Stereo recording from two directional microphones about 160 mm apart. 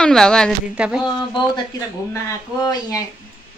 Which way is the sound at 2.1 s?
20° left (ahead or behind).